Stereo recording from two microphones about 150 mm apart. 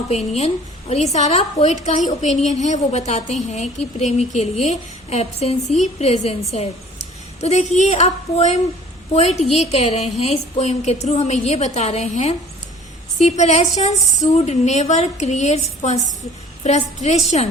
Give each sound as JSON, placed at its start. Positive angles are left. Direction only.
{"t": 0.1, "sound": "a woman's voice", "side_deg": 45}
{"t": 7.4, "sound": "a woman's voice", "side_deg": 50}